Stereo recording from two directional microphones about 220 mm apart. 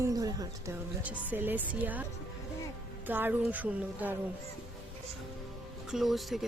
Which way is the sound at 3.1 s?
10° right (ahead or behind).